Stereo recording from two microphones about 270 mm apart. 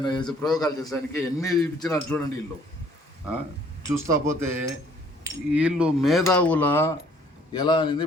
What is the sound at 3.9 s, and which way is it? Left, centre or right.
Speech, centre.